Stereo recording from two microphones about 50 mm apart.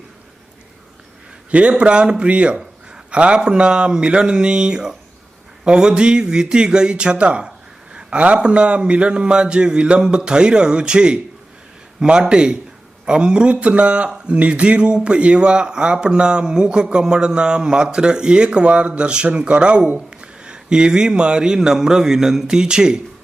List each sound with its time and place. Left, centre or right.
1.5 s a man's voice: right